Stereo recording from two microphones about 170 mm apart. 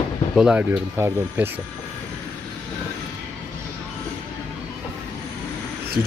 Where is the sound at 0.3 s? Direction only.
5° right (ahead or behind).